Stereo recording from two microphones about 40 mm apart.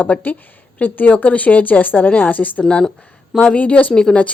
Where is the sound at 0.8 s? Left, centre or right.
Left.